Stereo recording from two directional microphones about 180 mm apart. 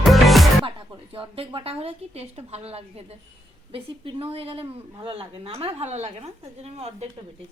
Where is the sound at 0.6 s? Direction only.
30° right (ahead or behind).